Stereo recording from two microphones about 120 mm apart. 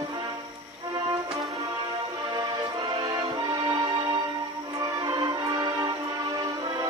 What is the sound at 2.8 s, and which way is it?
Music, 35° right (ahead or behind).